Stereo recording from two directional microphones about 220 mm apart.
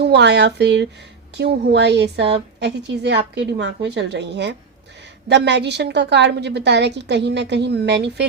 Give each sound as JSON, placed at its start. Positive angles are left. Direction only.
{"t": 0.0, "sound": "a woman's voice", "side_deg": -50}